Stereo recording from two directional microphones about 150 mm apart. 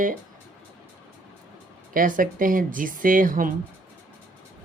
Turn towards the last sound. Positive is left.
turn(degrees=-65)  # may be behind; listen again after turning